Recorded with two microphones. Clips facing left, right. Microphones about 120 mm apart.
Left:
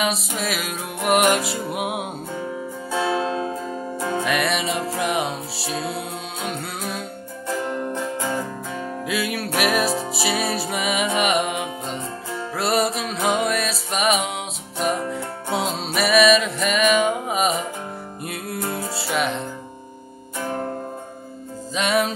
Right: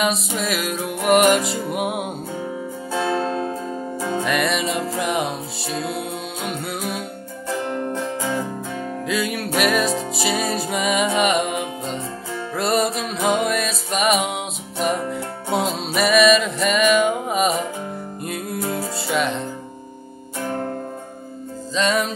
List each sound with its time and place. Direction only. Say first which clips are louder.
0.4 s music: right 3 dB; centre (ahead or behind)
18.8 s music: right 1 dB; centre (ahead or behind)
21.7 s music: even; 5° left (ahead or behind)